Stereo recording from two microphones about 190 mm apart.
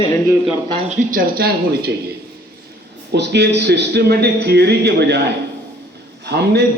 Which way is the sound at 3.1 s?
65° right (ahead or behind).